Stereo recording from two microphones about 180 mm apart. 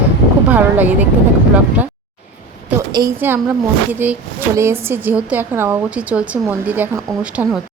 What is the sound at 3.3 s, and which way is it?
A woman's voice, 10° right (ahead or behind).